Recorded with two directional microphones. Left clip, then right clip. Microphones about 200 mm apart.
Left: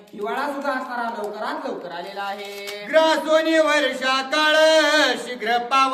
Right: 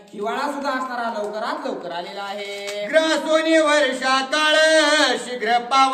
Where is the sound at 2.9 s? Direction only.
15° left (ahead or behind).